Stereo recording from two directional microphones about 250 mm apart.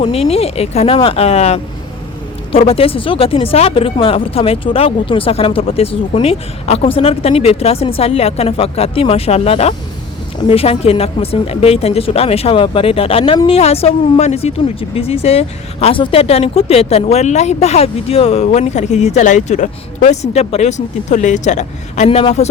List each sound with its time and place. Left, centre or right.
0.0 s speech: left